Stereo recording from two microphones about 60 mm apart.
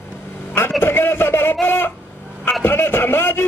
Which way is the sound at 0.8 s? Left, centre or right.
Left.